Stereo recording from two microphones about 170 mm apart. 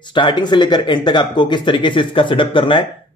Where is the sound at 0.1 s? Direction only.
30° left (ahead or behind).